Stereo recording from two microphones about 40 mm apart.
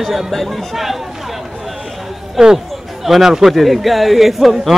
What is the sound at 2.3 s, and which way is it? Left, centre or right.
A man's voice, centre.